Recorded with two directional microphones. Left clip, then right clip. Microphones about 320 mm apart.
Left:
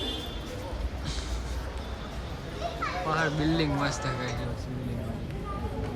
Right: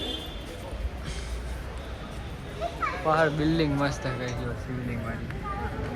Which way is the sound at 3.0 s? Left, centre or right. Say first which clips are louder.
Right 5 dB; centre.